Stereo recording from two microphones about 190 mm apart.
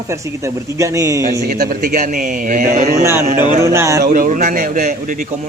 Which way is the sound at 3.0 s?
15° right (ahead or behind).